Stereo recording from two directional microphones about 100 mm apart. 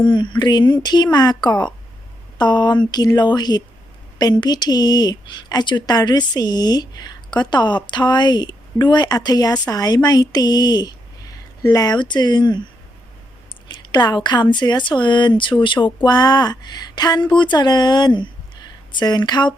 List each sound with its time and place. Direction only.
0.0 s speech: 50° left (ahead or behind)
13.9 s speech: 45° left (ahead or behind)